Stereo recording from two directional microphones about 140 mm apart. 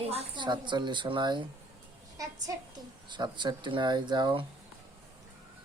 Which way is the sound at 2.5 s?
25° right (ahead or behind).